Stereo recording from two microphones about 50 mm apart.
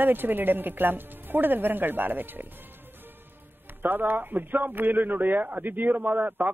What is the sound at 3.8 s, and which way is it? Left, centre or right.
A man's voice, right.